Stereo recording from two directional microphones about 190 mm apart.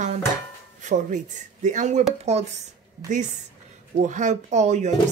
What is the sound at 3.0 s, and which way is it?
Speech, 20° right (ahead or behind).